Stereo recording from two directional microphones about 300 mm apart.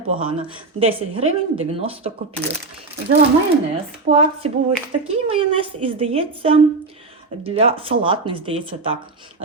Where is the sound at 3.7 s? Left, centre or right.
Centre.